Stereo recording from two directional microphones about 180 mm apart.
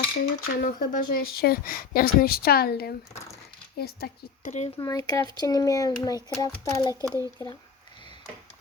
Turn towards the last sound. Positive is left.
turn(degrees=-20)  # may be behind; listen again after turning